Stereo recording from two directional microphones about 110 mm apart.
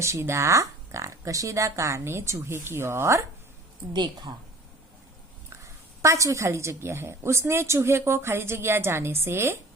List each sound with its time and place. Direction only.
0.0 s a woman's voice: 25° right (ahead or behind)
3.9 s a woman's voice: 40° right (ahead or behind)
6.0 s a woman's voice: 30° right (ahead or behind)